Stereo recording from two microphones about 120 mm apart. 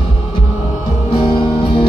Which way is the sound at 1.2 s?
45° left (ahead or behind).